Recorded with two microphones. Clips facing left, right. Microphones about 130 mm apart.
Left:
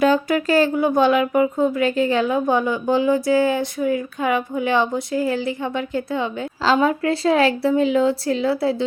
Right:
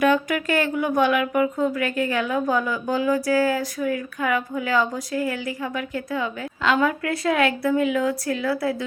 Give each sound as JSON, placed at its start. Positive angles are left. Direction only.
{"t": 0.0, "sound": "speech", "side_deg": 30}